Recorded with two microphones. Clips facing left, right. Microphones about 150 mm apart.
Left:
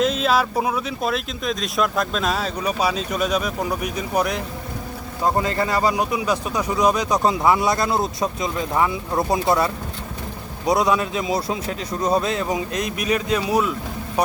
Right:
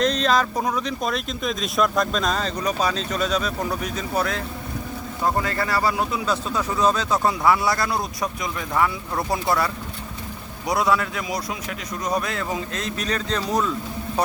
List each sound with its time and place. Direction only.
0.0 s speech: 5° left (ahead or behind)